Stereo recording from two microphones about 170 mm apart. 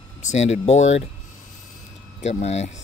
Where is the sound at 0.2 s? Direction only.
40° left (ahead or behind).